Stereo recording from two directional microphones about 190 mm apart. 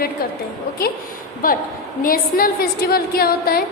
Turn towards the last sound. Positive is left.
turn(degrees=50)  # may be behind; listen again after turning